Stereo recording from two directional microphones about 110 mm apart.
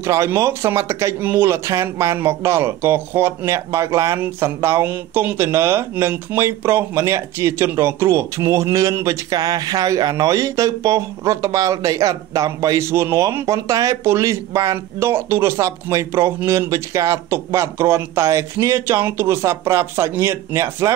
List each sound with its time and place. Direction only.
0.0 s speech: 25° right (ahead or behind)